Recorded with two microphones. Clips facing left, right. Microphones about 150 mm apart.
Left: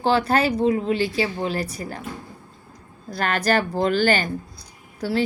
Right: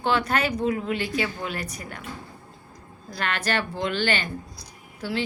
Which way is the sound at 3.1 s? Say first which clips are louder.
Left 6 dB; 40° left (ahead or behind).